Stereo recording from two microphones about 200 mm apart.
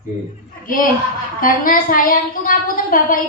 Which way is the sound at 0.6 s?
45° left (ahead or behind).